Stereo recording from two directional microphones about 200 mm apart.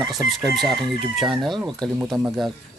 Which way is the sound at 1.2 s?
Centre (ahead or behind).